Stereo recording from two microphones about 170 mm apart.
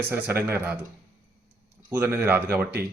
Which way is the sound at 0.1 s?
10° right (ahead or behind).